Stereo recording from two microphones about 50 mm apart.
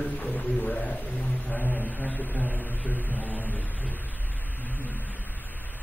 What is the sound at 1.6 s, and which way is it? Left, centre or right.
Speech, left.